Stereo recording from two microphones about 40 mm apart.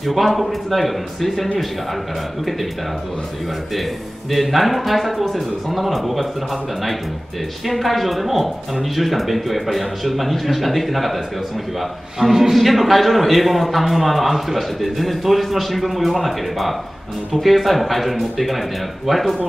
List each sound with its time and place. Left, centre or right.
0.0 s a man's voice: centre
4.3 s a man's voice: centre